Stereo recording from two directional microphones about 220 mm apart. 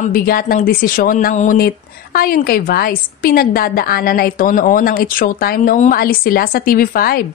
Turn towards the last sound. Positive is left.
turn(degrees=40)  # may be behind; listen again after turning